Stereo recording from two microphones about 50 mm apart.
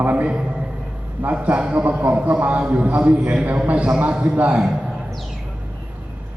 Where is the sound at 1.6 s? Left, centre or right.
Right.